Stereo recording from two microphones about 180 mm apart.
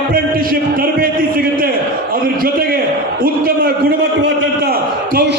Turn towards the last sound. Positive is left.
turn(degrees=-55)  # may be behind; listen again after turning